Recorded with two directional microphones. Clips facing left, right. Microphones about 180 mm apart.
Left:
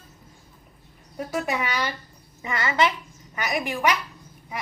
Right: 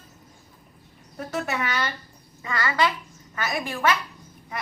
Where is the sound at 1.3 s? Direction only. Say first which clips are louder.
Left 1 dB; 10° left (ahead or behind).